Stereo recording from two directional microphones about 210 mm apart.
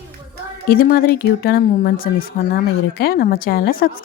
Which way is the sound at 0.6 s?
45° left (ahead or behind).